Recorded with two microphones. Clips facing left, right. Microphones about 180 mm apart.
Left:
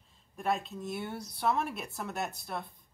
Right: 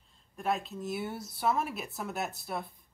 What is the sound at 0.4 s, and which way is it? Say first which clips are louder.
Speech: even; centre (ahead or behind).